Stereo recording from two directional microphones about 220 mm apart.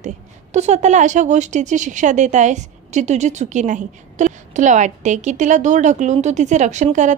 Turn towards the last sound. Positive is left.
turn(degrees=-35)  # may be behind; listen again after turning